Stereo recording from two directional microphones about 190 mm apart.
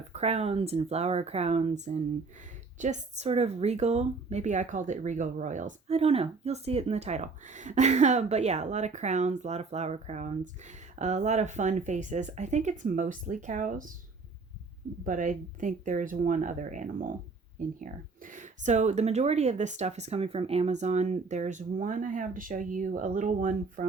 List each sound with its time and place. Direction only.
0.1 s speech: 35° right (ahead or behind)
15.0 s speech: 45° right (ahead or behind)